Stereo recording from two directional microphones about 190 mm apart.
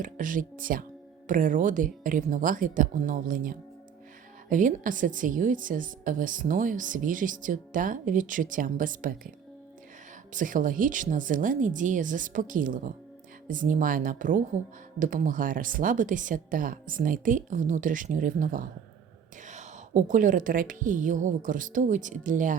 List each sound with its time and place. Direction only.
0.0 s a woman's voice: 45° right (ahead or behind)
10.3 s a woman's voice: 45° right (ahead or behind)